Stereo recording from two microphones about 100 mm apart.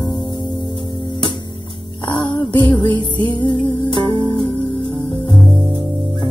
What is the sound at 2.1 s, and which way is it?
Music, 50° left (ahead or behind).